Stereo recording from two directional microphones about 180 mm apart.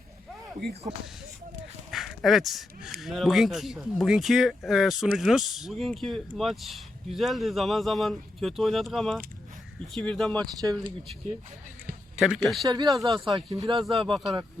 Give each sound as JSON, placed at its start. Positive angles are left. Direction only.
{"t": 1.9, "sound": "speech", "side_deg": 0}
{"t": 10.3, "sound": "speech", "side_deg": -20}
{"t": 12.1, "sound": "speech", "side_deg": -5}
{"t": 12.6, "sound": "speech", "side_deg": -20}